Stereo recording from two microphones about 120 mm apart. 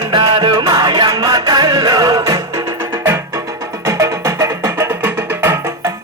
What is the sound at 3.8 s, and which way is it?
Music, 25° right (ahead or behind).